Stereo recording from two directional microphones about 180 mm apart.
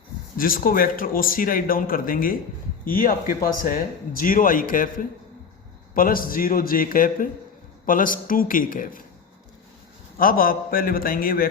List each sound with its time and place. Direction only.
0.3 s speech: 50° left (ahead or behind)
10.2 s speech: 50° left (ahead or behind)